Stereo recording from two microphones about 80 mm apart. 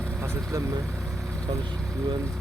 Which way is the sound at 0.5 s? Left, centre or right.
Right.